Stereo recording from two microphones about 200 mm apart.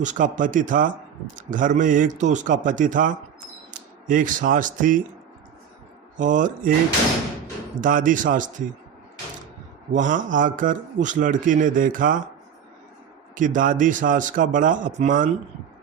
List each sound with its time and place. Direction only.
0.0 s a man's voice: 40° right (ahead or behind)
6.1 s a man's voice: 40° right (ahead or behind)
7.8 s a man's voice: 40° right (ahead or behind)
9.9 s a man's voice: 40° right (ahead or behind)
13.3 s a man's voice: 40° right (ahead or behind)